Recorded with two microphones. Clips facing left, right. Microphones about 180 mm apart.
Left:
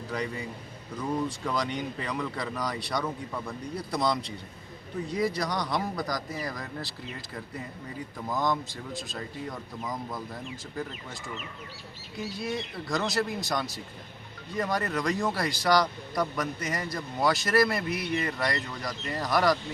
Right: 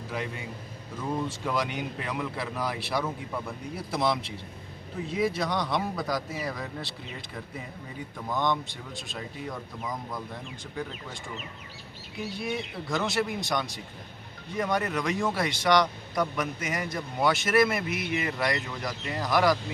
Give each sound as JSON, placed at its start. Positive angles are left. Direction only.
{"t": 0.1, "sound": "speech", "side_deg": -5}
{"t": 5.2, "sound": "speech", "side_deg": 0}
{"t": 8.3, "sound": "speech", "side_deg": 0}
{"t": 12.4, "sound": "speech", "side_deg": 0}